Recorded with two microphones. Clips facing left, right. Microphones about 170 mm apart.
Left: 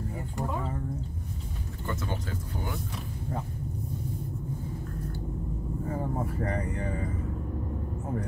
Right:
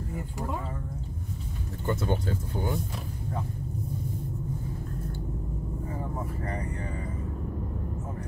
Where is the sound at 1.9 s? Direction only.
30° right (ahead or behind).